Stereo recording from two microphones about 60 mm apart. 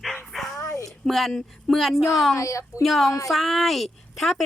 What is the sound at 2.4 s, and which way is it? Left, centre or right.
Speech, left.